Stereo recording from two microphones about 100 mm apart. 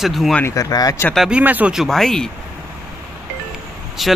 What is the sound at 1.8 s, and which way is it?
Speech, 5° left (ahead or behind).